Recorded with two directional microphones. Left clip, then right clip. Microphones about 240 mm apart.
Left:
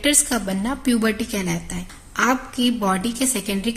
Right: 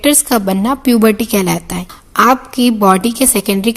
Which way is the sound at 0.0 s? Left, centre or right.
Right.